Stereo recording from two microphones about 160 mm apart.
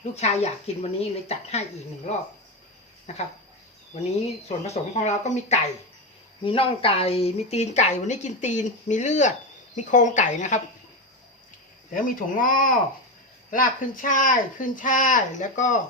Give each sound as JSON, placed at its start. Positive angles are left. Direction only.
{"t": 0.0, "sound": "speech", "side_deg": 45}
{"t": 3.1, "sound": "speech", "side_deg": 45}
{"t": 4.4, "sound": "speech", "side_deg": 45}
{"t": 6.4, "sound": "speech", "side_deg": 35}
{"t": 11.9, "sound": "speech", "side_deg": 60}